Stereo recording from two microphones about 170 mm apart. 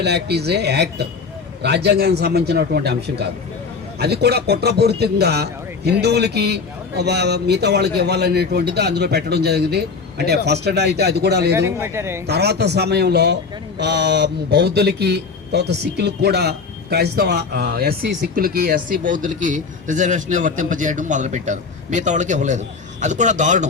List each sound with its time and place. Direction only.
0.0 s a man's voice: 75° right (ahead or behind)
11.5 s a man's voice: 15° right (ahead or behind)
12.2 s a man's voice: 75° right (ahead or behind); by 23.6 s 45° right (ahead or behind)